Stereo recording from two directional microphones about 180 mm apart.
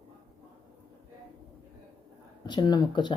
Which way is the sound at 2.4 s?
25° left (ahead or behind).